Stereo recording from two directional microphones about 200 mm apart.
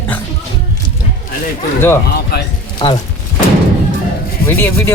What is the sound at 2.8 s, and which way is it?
Speech, 25° left (ahead or behind).